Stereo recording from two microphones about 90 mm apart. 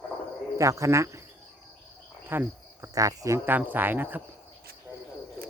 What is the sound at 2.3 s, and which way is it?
Cricket, 25° right (ahead or behind).